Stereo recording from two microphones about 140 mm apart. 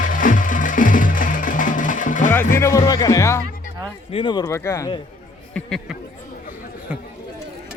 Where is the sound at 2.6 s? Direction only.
20° left (ahead or behind).